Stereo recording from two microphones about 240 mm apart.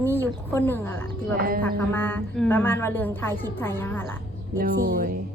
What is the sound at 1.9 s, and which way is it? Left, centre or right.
A woman's voice, centre.